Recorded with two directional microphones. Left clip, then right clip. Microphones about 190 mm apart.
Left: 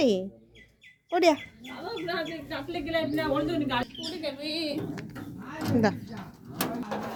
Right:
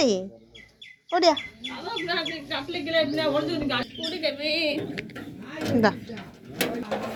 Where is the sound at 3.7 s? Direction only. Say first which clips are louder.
Right 2 dB; 45° left (ahead or behind).